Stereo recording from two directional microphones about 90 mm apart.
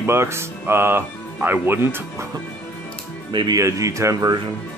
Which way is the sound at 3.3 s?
55° right (ahead or behind).